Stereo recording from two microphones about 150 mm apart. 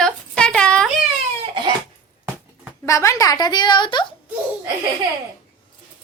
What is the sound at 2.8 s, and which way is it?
A woman's voice, 20° left (ahead or behind).